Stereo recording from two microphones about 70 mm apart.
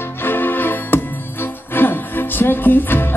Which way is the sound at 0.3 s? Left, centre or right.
Left.